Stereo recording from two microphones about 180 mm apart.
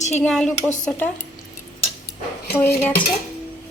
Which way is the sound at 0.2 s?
5° left (ahead or behind).